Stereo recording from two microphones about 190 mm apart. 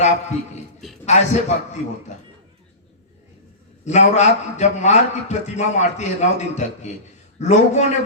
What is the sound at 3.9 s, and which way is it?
A man's voice, 35° left (ahead or behind).